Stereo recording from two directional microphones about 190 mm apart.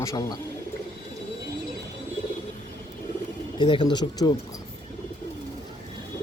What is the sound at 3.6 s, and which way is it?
Speech, 25° left (ahead or behind).